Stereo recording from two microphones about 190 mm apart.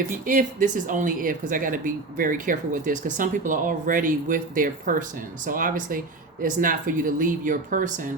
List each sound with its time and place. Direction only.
0.1 s speech: 45° right (ahead or behind)